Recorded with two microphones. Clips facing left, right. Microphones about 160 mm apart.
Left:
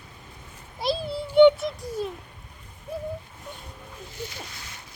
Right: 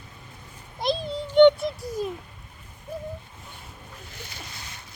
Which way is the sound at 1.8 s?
10° right (ahead or behind).